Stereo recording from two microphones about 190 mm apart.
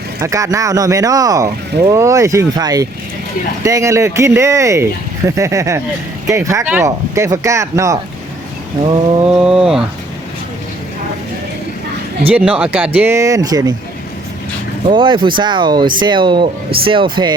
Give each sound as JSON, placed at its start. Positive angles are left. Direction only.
{"t": 0.2, "sound": "speech", "side_deg": -15}
{"t": 9.1, "sound": "a sound", "side_deg": -5}
{"t": 12.3, "sound": "speech", "side_deg": -5}
{"t": 14.8, "sound": "speech", "side_deg": -25}